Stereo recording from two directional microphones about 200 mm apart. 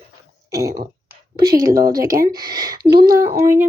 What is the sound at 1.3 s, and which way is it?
A woman's voice, 20° right (ahead or behind).